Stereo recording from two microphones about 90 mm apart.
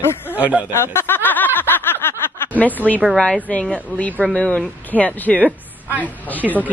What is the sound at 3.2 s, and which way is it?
A woman's voice, 15° left (ahead or behind).